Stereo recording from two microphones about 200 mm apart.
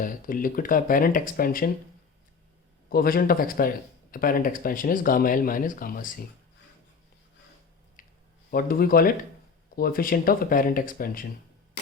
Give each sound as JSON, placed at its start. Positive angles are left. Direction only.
{"t": 0.0, "sound": "speech", "side_deg": 45}
{"t": 2.9, "sound": "speech", "side_deg": 45}
{"t": 8.0, "sound": "a sound", "side_deg": 40}
{"t": 8.4, "sound": "speech", "side_deg": 45}